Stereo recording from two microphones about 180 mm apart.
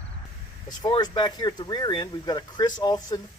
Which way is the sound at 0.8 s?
25° left (ahead or behind).